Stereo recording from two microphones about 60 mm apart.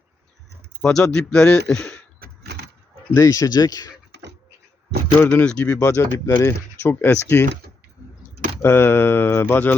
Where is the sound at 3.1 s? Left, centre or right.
Left.